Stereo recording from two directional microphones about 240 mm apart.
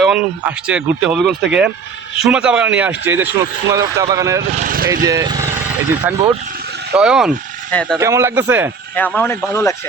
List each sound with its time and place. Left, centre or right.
0.0 s speech: centre
4.5 s speech: right
5.0 s speech: centre
7.9 s speech: centre
9.0 s speech: centre